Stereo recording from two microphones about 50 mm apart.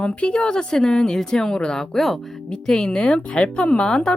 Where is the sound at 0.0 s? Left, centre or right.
Left.